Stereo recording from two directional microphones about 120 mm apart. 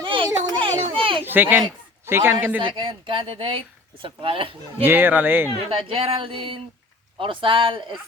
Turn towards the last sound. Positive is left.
turn(degrees=-45)  # may be behind; listen again after turning